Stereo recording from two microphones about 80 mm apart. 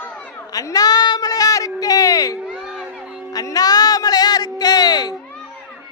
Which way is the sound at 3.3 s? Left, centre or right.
Left.